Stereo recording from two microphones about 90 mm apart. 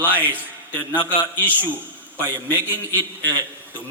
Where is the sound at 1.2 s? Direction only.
20° right (ahead or behind).